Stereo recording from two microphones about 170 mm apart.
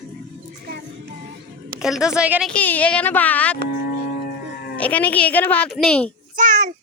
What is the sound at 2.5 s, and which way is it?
Speech, 10° left (ahead or behind).